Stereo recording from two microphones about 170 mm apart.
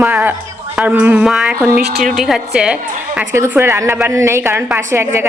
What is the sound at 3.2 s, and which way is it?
A woman's voice, 15° right (ahead or behind).